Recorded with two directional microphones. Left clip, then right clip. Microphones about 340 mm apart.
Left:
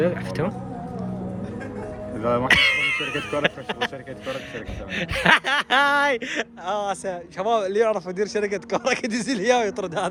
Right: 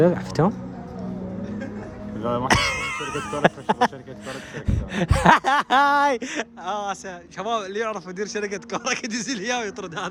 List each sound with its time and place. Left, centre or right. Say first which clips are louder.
0.0 s speech: right 4 dB; centre
2.5 s speech: left 4 dB; centre